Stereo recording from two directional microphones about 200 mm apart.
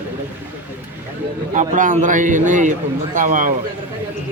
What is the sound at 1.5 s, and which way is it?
A man's voice, 40° right (ahead or behind).